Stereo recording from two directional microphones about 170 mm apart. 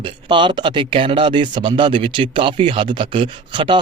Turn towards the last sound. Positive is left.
turn(degrees=-30)  # may be behind; listen again after turning